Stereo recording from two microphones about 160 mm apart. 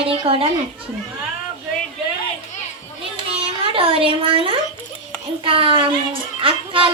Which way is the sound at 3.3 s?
35° right (ahead or behind).